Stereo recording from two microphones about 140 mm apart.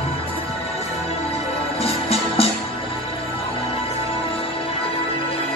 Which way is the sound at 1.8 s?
45° left (ahead or behind).